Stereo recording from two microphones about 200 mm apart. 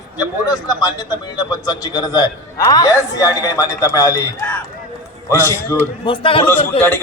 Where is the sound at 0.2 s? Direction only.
20° left (ahead or behind).